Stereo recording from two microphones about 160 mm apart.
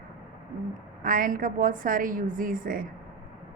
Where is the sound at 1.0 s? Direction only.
60° right (ahead or behind).